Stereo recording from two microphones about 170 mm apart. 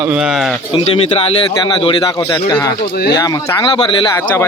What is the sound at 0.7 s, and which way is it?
Speech, 35° left (ahead or behind).